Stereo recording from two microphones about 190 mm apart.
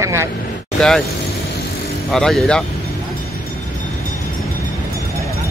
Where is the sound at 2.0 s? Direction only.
Centre (ahead or behind).